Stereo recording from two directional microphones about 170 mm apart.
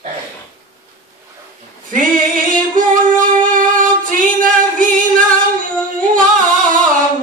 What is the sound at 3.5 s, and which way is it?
Singing, 50° right (ahead or behind).